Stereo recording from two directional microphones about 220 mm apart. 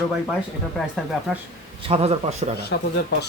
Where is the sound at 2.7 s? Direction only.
50° left (ahead or behind).